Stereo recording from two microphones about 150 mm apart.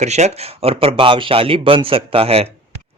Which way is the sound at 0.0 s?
50° right (ahead or behind).